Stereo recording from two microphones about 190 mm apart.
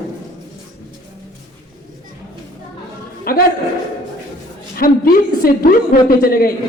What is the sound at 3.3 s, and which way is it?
Speech, 50° left (ahead or behind).